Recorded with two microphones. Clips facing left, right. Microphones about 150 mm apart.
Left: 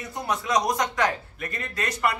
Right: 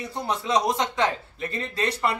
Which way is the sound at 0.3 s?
25° right (ahead or behind).